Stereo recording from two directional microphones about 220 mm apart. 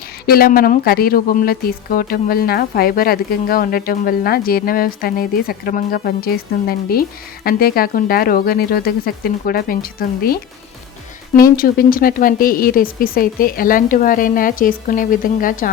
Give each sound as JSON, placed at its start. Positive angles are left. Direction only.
{"t": 0.3, "sound": "speech", "side_deg": 40}